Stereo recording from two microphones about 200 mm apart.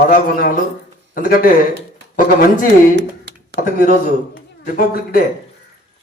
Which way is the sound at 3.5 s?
40° left (ahead or behind).